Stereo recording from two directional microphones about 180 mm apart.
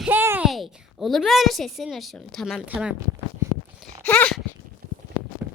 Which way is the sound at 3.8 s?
10° left (ahead or behind).